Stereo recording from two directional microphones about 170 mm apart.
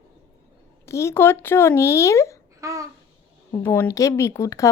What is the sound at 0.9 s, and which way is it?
Speech, 15° left (ahead or behind).